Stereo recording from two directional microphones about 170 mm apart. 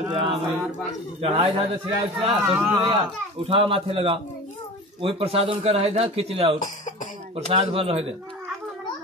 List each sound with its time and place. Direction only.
0.1 s speech: 30° right (ahead or behind)
2.4 s speech: 10° right (ahead or behind)
3.4 s speech: 30° right (ahead or behind)